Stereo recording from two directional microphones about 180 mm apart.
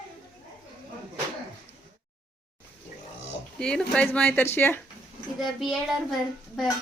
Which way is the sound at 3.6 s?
5° left (ahead or behind).